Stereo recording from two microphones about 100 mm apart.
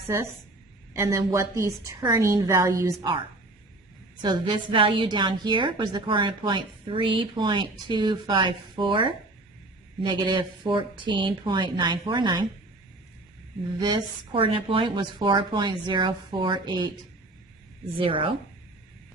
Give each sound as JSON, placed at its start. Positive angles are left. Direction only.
{"t": 0.1, "sound": "a woman's voice", "side_deg": -25}
{"t": 3.0, "sound": "a woman's voice", "side_deg": -55}
{"t": 13.7, "sound": "a woman's voice", "side_deg": -50}
{"t": 17.9, "sound": "speech", "side_deg": -65}